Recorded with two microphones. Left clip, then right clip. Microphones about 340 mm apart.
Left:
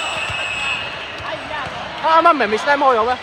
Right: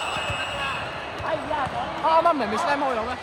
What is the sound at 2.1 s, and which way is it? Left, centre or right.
Speech, left.